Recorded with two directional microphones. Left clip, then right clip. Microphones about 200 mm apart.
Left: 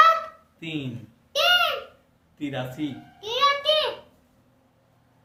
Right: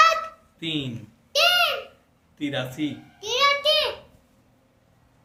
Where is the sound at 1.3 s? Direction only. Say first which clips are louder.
Right 1 dB; 55° right (ahead or behind).